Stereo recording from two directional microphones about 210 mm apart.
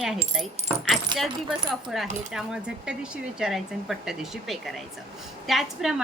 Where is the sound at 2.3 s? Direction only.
5° right (ahead or behind).